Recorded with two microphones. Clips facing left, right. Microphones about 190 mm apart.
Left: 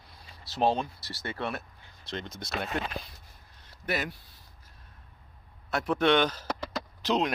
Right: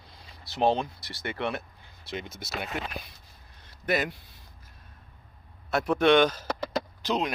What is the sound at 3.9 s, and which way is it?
Speech, 20° right (ahead or behind).